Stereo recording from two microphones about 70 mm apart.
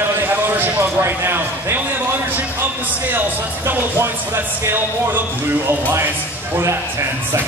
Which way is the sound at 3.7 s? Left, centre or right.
Right.